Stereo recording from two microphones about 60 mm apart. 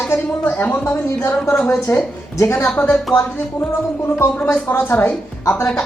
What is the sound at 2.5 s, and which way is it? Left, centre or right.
Speech, left.